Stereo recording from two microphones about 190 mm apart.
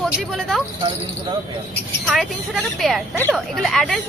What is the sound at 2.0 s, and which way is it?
A woman's voice, centre (ahead or behind).